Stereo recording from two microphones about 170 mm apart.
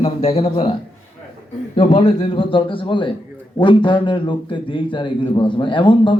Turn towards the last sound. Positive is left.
turn(degrees=30)  # may be behind; listen again after turning